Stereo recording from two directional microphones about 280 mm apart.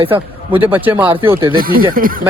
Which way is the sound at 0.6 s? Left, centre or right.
Centre.